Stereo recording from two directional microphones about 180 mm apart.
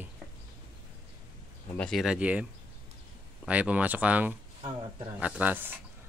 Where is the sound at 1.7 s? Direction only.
5° left (ahead or behind).